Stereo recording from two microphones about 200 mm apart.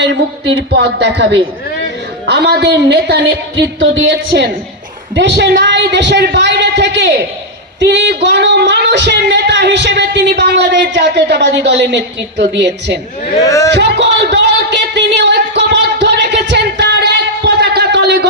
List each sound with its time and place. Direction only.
0.0 s speech: 60° right (ahead or behind)
5.1 s speech: 60° right (ahead or behind)
13.4 s speech: 15° left (ahead or behind)
13.7 s a sound: 55° right (ahead or behind)